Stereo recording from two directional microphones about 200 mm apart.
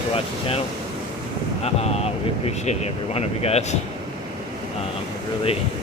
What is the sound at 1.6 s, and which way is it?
Speech, 30° left (ahead or behind).